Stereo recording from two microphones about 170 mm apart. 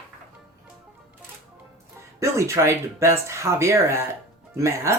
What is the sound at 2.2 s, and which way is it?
Speech, 15° right (ahead or behind).